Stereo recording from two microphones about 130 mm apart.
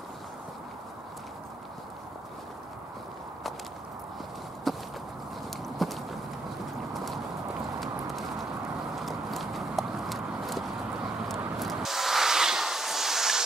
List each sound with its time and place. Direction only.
4.7 s walk: centre (ahead or behind)
5.8 s clip-clop: centre (ahead or behind)
7.8 s clip-clop: centre (ahead or behind)
8.9 s horse: centre (ahead or behind)
11.2 s a sound: centre (ahead or behind)